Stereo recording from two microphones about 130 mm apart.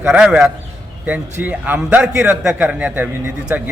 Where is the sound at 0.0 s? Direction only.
10° right (ahead or behind).